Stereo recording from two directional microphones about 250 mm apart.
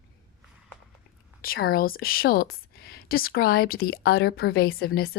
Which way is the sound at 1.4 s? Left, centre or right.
Left.